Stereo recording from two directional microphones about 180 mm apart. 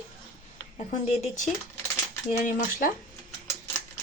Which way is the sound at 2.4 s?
50° left (ahead or behind).